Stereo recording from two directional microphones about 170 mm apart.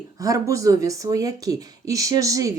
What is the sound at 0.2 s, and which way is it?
Speech, 20° right (ahead or behind).